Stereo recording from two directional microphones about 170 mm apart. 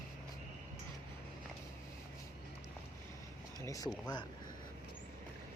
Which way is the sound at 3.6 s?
20° left (ahead or behind).